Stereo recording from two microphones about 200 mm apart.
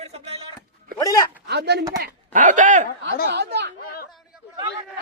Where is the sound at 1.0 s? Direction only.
20° left (ahead or behind).